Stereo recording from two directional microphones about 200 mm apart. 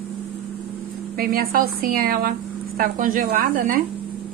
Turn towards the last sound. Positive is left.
turn(degrees=-45)  # may be behind; listen again after turning